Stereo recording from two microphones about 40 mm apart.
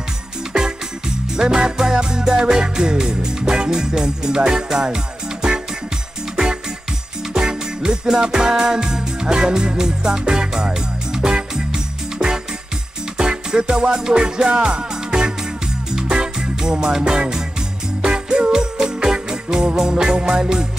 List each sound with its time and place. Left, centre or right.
0.5 s music: right